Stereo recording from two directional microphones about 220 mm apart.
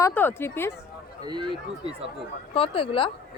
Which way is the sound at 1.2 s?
20° right (ahead or behind).